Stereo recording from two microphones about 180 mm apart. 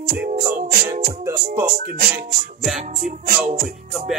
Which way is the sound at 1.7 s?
50° right (ahead or behind).